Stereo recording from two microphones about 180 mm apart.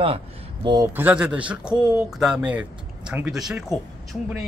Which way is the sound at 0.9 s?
10° right (ahead or behind).